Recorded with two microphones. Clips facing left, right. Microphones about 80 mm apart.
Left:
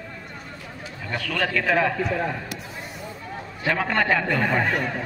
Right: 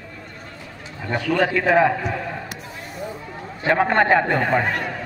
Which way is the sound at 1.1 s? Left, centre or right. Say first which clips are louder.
Right 6 dB; right.